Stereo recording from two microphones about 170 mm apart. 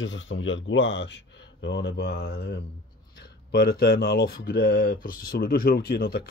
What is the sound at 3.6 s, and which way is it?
Speech, 65° left (ahead or behind).